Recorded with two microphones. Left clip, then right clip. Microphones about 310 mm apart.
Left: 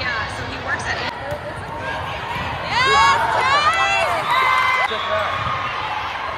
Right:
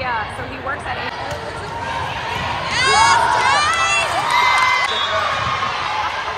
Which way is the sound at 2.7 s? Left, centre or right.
Centre.